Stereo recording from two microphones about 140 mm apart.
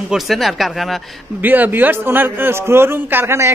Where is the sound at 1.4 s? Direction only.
15° right (ahead or behind).